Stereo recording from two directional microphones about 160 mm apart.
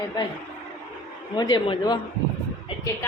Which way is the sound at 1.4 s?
25° left (ahead or behind).